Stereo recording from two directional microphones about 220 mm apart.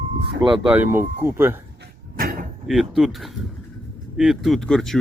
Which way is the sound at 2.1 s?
40° right (ahead or behind).